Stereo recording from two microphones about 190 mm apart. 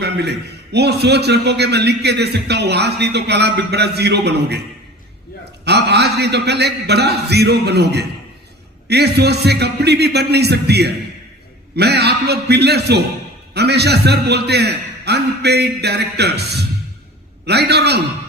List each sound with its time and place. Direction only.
0.0 s a man's voice: 60° right (ahead or behind)
5.6 s a man's voice: 60° right (ahead or behind)